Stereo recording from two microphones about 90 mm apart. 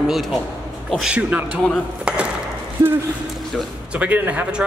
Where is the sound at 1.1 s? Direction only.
15° right (ahead or behind).